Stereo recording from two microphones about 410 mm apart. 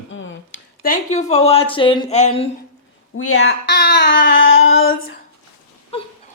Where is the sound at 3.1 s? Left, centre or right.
Left.